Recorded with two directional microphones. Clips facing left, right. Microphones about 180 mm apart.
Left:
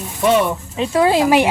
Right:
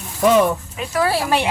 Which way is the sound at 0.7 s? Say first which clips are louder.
Left 5 dB; 25° left (ahead or behind).